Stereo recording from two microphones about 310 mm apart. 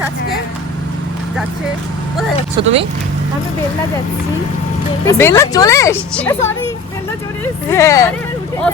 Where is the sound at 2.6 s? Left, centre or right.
Centre.